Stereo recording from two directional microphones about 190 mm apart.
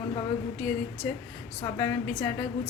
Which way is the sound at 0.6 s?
5° left (ahead or behind).